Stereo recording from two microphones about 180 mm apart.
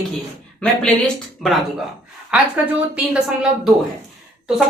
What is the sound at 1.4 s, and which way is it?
Speech, centre (ahead or behind).